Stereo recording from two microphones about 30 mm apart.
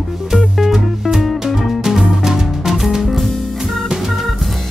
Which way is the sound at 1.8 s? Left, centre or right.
Centre.